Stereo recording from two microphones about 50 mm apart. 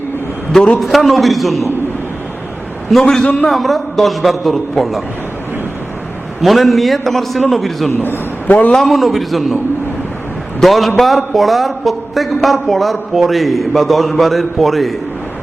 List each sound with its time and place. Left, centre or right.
0.7 s a man's voice: centre
2.9 s a man's voice: centre
6.4 s a man's voice: centre
7.9 s a man's voice: left
8.4 s a man's voice: left
8.9 s a man's voice: centre
10.6 s a man's voice: centre